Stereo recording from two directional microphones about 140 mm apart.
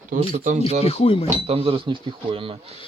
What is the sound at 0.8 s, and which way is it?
Speech, 45° left (ahead or behind).